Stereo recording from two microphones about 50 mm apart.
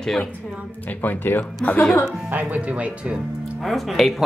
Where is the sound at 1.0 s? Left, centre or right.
Left.